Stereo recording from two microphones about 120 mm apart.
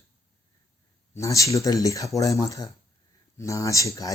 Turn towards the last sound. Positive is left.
turn(degrees=25)  # may be behind; listen again after turning